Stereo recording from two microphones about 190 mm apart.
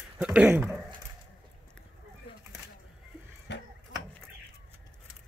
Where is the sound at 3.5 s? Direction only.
65° left (ahead or behind).